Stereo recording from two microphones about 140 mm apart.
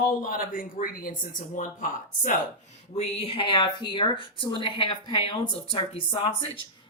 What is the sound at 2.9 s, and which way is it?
Speech, 45° left (ahead or behind).